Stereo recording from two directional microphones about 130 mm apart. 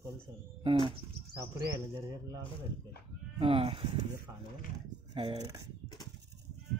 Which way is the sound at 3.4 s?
40° right (ahead or behind).